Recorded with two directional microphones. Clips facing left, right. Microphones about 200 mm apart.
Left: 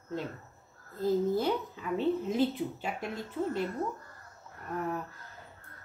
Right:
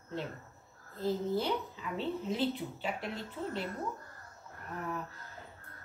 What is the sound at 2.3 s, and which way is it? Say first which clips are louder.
Speech: left 5 dB; 45° left (ahead or behind).